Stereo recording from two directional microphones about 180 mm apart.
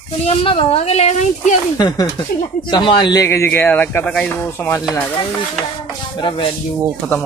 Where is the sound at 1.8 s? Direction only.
20° left (ahead or behind).